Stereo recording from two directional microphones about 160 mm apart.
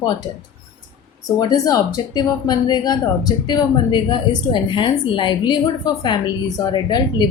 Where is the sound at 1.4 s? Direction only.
25° left (ahead or behind).